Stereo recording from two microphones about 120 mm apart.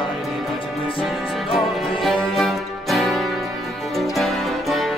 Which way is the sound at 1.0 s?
Centre (ahead or behind).